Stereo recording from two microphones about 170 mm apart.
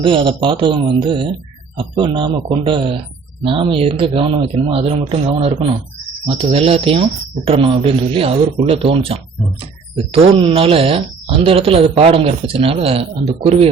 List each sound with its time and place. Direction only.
0.0 s a man's voice: 30° right (ahead or behind)